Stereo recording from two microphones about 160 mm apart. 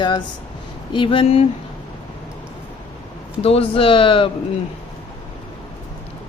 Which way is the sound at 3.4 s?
35° left (ahead or behind).